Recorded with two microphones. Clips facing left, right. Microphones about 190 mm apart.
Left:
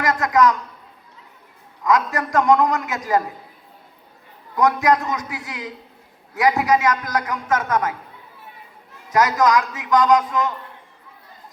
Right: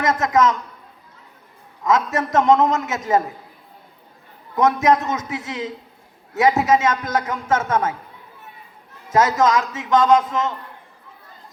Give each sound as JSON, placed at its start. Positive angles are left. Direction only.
{"t": 0.0, "sound": "a man's voice", "side_deg": -25}
{"t": 1.8, "sound": "a man's voice", "side_deg": -25}
{"t": 4.5, "sound": "a man's voice", "side_deg": -25}
{"t": 9.0, "sound": "a man's voice", "side_deg": -25}